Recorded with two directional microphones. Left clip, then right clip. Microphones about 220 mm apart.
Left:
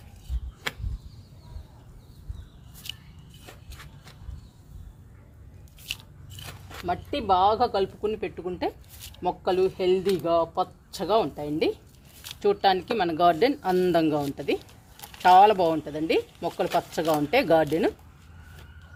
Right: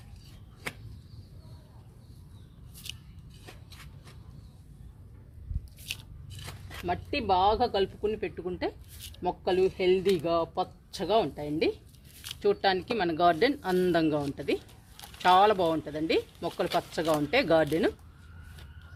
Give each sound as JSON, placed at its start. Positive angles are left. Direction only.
{"t": 5.8, "sound": "scissors", "side_deg": 5}
{"t": 6.8, "sound": "speech", "side_deg": 10}